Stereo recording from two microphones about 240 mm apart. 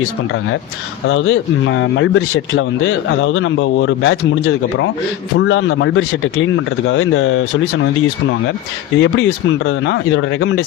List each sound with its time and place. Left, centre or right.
1.0 s speech: left
9.0 s speech: left